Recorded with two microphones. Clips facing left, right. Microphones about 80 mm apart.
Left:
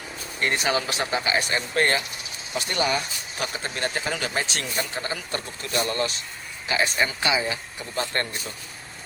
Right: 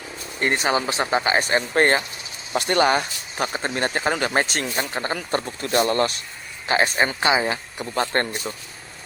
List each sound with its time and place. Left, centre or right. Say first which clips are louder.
0.3 s speech: right 3 dB; right
2.5 s speech: right 6 dB; right
3.3 s speech: right 6 dB; right